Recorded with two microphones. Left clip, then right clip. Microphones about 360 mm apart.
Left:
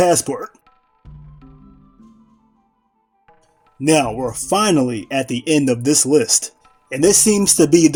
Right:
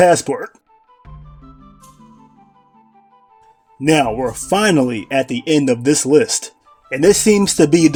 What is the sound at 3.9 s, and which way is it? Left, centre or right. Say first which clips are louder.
Speech: right 2 dB; left.